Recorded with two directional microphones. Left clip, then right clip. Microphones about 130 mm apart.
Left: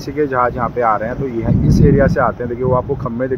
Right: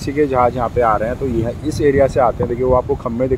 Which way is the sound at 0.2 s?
15° right (ahead or behind).